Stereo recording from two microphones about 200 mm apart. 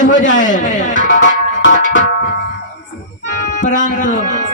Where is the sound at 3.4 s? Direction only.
40° left (ahead or behind).